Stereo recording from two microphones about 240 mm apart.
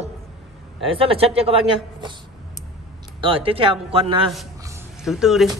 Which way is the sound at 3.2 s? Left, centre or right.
Right.